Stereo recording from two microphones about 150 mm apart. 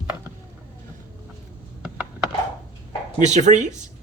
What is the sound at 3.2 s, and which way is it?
Speech, 50° right (ahead or behind).